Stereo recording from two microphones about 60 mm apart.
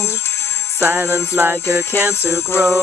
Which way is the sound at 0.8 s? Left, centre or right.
Right.